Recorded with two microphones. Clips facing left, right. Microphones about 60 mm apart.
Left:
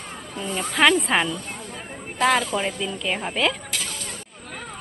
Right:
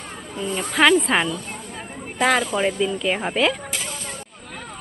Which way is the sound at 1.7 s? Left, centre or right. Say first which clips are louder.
Right 1 dB; centre.